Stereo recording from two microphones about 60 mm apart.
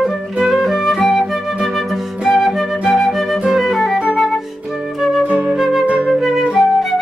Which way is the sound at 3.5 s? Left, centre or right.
Centre.